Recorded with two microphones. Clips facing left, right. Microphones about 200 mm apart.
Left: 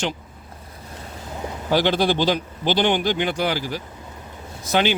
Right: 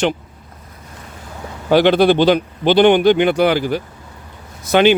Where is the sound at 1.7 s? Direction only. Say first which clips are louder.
Right 8 dB; 65° right (ahead or behind).